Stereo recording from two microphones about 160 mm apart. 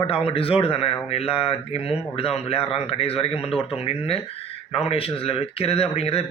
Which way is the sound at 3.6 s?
35° left (ahead or behind).